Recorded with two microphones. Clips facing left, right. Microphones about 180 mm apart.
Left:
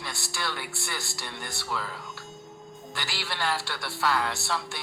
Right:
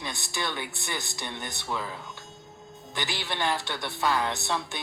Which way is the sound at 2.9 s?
20° right (ahead or behind).